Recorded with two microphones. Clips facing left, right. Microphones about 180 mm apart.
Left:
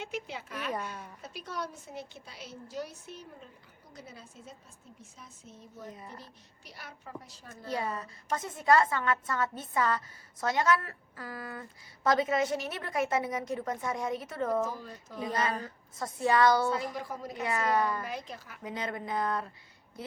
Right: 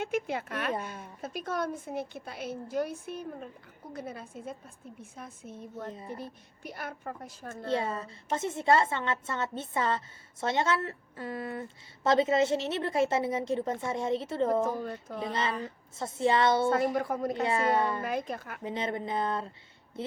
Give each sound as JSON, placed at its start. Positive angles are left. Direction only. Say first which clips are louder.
{"t": 0.0, "sound": "a woman's voice", "louder": "right 7 dB", "side_deg": -55}
{"t": 7.7, "sound": "a woman's voice", "louder": "right 3 dB", "side_deg": -25}
{"t": 14.6, "sound": "a woman's voice", "louder": "right 4 dB", "side_deg": -55}
{"t": 15.2, "sound": "a woman's voice", "louder": "left 1 dB", "side_deg": -25}
{"t": 16.6, "sound": "a woman's voice", "louder": "right 6 dB", "side_deg": -55}
{"t": 17.4, "sound": "a woman's voice", "louder": "even", "side_deg": -30}
{"t": 18.0, "sound": "a woman's voice", "louder": "right 7 dB", "side_deg": -50}
{"t": 18.6, "sound": "a woman's voice", "louder": "right 2 dB", "side_deg": -25}